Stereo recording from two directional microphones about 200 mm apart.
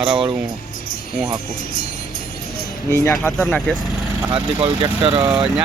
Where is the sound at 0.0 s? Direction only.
25° right (ahead or behind).